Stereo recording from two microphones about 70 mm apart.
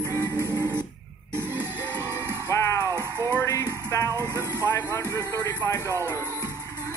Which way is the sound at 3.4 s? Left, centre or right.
Left.